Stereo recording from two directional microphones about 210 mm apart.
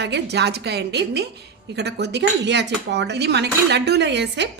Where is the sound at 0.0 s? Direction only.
55° right (ahead or behind).